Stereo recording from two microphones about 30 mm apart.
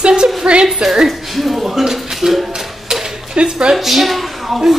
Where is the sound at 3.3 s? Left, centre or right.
Right.